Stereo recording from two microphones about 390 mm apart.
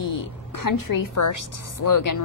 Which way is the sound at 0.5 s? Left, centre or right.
Left.